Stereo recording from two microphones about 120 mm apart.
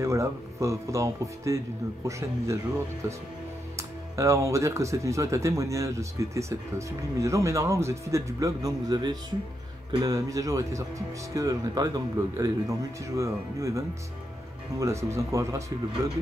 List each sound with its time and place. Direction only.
0.0 s speech: 25° right (ahead or behind)
3.7 s speech: 25° right (ahead or behind)